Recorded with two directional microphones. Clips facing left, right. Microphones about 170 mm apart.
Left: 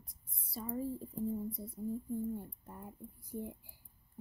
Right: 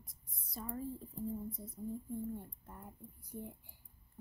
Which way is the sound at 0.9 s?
40° left (ahead or behind).